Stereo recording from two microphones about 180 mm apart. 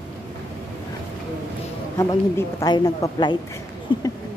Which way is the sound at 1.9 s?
20° left (ahead or behind).